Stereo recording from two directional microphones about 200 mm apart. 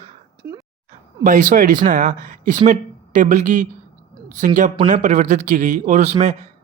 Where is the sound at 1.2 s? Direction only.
40° right (ahead or behind).